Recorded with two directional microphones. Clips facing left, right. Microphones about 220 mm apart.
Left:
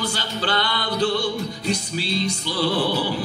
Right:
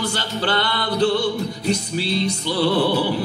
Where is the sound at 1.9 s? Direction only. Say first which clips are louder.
Right 3 dB; 60° right (ahead or behind).